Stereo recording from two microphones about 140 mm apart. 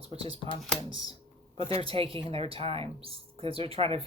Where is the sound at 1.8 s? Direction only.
40° right (ahead or behind).